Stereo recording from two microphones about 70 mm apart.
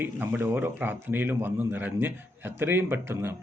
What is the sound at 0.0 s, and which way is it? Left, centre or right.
A man's voice, right.